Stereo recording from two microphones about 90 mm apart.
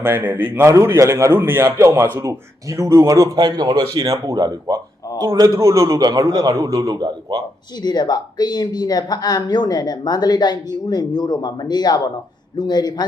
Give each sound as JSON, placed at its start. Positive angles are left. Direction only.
{"t": 0.0, "sound": "a man's voice", "side_deg": -20}
{"t": 0.7, "sound": "speech", "side_deg": -35}
{"t": 4.0, "sound": "a man's voice", "side_deg": -35}
{"t": 7.8, "sound": "a woman's voice", "side_deg": 50}